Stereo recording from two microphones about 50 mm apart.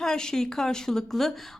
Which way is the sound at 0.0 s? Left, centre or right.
Centre.